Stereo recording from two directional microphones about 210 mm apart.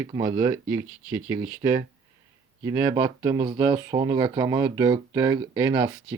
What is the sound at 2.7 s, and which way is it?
Speech, 15° right (ahead or behind).